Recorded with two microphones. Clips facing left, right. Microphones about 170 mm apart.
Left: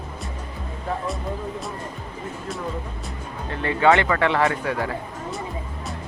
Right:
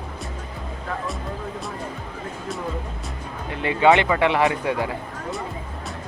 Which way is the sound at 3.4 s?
15° right (ahead or behind).